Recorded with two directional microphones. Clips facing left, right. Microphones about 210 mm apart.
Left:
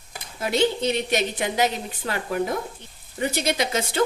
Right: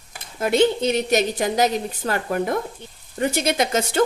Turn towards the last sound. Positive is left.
turn(degrees=-50)  # may be behind; listen again after turning